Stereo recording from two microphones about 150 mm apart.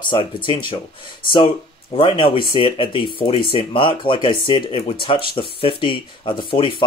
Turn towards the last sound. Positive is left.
turn(degrees=35)  # may be behind; listen again after turning